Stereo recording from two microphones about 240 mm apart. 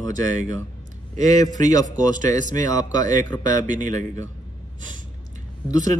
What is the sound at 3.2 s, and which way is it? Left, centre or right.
Speech, centre.